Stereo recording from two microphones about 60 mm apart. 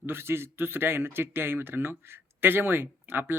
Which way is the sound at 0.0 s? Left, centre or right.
Right.